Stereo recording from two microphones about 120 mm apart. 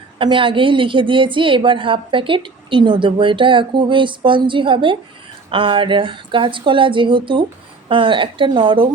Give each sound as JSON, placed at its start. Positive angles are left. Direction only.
{"t": 0.2, "sound": "a woman's voice", "side_deg": -45}